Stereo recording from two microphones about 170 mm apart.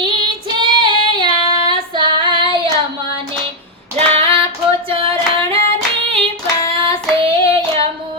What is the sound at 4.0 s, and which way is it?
Female singing, 35° right (ahead or behind).